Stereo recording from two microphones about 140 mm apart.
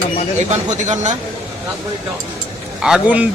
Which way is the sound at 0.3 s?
55° right (ahead or behind).